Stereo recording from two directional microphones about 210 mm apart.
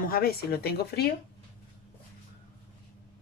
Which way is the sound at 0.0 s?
45° left (ahead or behind).